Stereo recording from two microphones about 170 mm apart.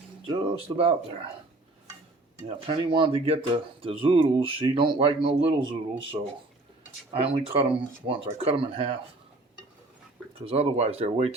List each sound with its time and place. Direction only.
0.3 s speech: 35° right (ahead or behind)
2.6 s speech: 30° right (ahead or behind)
10.4 s speech: 35° right (ahead or behind)